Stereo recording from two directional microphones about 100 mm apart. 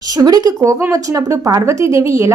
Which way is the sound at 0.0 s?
40° right (ahead or behind).